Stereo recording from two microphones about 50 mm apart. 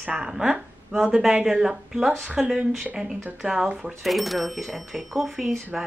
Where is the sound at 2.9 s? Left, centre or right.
Centre.